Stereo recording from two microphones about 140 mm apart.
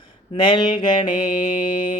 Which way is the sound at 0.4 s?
35° left (ahead or behind).